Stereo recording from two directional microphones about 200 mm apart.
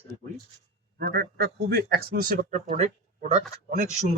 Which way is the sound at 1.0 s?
55° right (ahead or behind).